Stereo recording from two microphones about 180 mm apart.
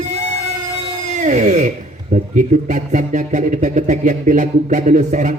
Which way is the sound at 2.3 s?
45° right (ahead or behind).